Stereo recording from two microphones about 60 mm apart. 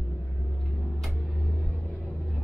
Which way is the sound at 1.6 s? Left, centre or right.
Centre.